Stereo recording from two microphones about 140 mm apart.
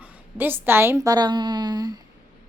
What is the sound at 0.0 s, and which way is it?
A woman's voice, 15° right (ahead or behind).